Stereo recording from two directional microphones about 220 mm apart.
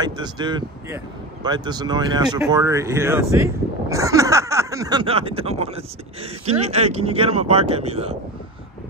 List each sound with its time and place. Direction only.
0.0 s speech: 20° right (ahead or behind)